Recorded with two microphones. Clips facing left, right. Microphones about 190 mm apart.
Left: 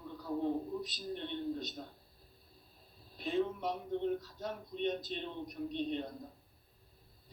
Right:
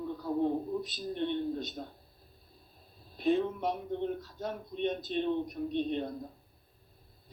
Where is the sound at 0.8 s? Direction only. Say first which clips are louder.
Right 6 dB; 55° right (ahead or behind).